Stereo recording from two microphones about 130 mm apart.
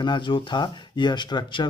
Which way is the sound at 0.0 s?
40° left (ahead or behind).